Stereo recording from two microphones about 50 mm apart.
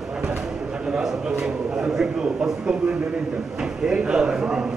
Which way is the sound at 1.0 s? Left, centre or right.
Centre.